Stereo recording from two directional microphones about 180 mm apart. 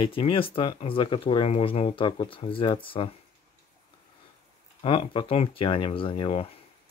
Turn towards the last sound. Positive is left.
turn(degrees=30)  # may be behind; listen again after turning